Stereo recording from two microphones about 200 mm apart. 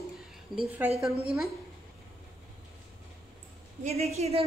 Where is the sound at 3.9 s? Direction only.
30° right (ahead or behind).